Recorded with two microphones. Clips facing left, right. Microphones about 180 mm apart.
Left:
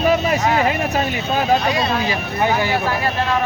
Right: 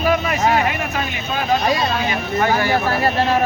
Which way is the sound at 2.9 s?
40° right (ahead or behind).